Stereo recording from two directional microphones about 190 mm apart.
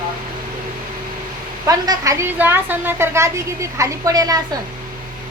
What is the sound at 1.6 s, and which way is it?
A woman's voice, 20° right (ahead or behind).